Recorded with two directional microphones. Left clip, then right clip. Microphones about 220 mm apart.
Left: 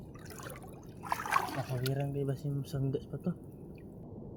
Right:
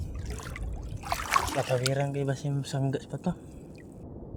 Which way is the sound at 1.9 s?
60° right (ahead or behind).